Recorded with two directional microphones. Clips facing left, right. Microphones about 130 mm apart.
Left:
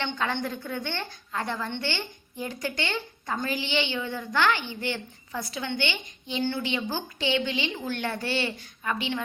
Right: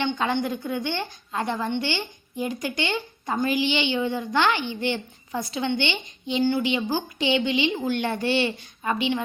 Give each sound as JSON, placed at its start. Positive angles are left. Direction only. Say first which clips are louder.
{"t": 0.0, "sound": "a woman's voice", "louder": "right 5 dB", "side_deg": -15}